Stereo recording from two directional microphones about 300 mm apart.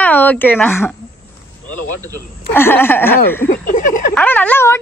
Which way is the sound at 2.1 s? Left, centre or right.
Centre.